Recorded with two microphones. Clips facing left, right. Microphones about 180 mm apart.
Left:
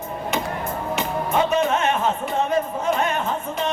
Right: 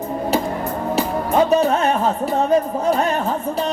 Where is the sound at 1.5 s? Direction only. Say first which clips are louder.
Right 4 dB; 35° right (ahead or behind).